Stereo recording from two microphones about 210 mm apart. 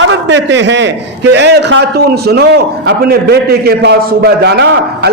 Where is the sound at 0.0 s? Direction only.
60° right (ahead or behind).